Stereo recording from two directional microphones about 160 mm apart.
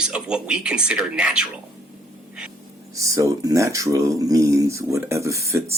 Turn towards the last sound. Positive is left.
turn(degrees=-20)  # may be behind; listen again after turning